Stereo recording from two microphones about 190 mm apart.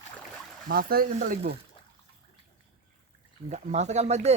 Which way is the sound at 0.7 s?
50° right (ahead or behind).